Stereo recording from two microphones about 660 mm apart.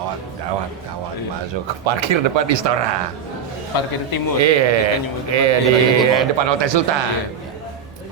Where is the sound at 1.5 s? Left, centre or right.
Right.